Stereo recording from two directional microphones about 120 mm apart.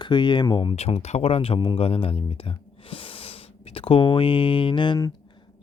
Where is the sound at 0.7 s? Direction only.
60° left (ahead or behind).